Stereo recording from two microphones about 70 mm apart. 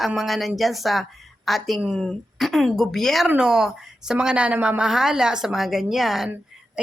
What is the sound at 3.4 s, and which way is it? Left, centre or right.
Speech, centre.